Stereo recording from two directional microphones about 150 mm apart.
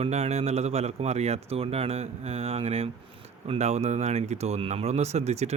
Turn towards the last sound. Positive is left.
turn(degrees=-45)  # may be behind; listen again after turning